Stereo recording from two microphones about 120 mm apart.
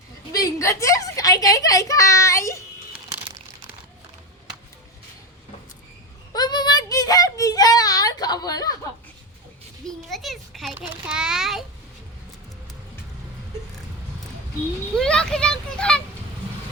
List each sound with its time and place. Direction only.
0.3 s a child's voice: 25° left (ahead or behind)
6.3 s child singing: 35° left (ahead or behind)
9.8 s a child's voice: centre (ahead or behind)
10.8 s a child's voice: 15° right (ahead or behind)
14.9 s a child's voice: 5° left (ahead or behind)